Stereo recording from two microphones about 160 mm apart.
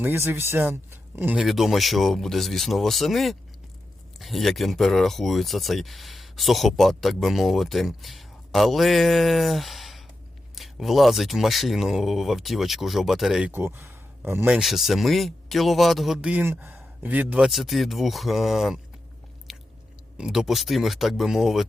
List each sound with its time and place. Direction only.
0.0 s speech: 15° right (ahead or behind)
19.5 s chewing: centre (ahead or behind)
20.1 s speech: 5° right (ahead or behind)